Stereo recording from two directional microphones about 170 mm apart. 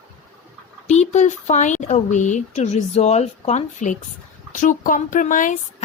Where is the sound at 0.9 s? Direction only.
45° left (ahead or behind).